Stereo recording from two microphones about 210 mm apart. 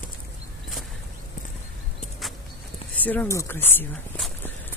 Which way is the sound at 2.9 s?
10° left (ahead or behind).